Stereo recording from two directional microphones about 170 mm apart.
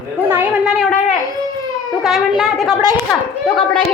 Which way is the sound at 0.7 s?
Centre (ahead or behind).